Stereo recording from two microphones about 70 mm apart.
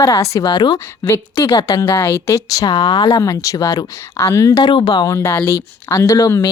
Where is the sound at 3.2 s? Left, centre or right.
Left.